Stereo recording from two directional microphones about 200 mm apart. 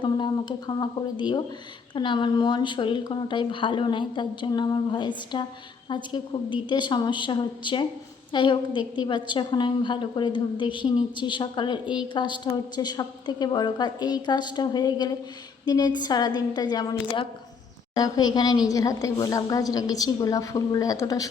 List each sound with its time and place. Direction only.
0.0 s a woman's voice: 25° left (ahead or behind)